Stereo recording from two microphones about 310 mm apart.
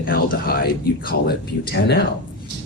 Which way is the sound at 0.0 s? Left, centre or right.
Left.